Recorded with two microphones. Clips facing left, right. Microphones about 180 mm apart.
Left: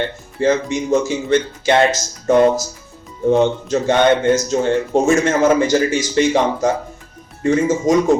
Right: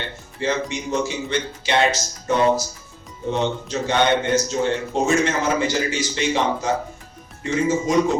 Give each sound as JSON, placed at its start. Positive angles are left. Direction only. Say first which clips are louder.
{"t": 0.3, "sound": "speech", "louder": "left 7 dB", "side_deg": 50}